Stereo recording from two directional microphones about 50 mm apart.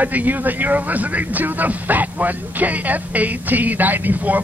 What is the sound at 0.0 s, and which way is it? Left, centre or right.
A man's voice, right.